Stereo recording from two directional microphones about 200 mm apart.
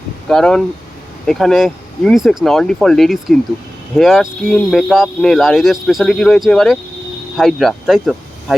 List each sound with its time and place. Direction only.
0.3 s speech: 5° left (ahead or behind)